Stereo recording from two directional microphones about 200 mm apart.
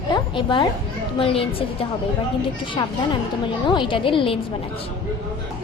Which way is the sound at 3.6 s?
25° left (ahead or behind).